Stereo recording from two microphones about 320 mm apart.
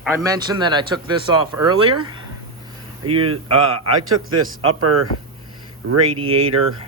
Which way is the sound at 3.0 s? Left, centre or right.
Right.